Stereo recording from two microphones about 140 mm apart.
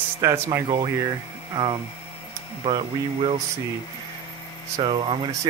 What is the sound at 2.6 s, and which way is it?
Speech, 40° right (ahead or behind).